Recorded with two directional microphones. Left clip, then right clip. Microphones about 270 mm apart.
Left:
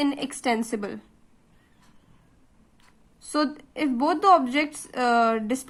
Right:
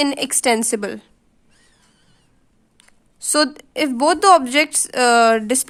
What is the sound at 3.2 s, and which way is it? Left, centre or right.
A woman's voice, right.